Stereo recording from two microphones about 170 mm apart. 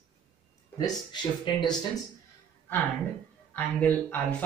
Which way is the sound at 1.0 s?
30° left (ahead or behind).